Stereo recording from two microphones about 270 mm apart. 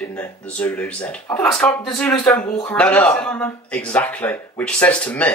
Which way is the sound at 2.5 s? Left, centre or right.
Centre.